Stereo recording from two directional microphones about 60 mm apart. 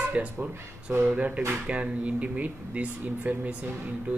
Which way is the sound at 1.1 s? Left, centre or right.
Right.